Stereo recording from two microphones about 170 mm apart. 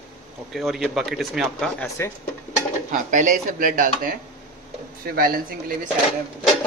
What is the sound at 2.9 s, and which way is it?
Speech, 50° right (ahead or behind).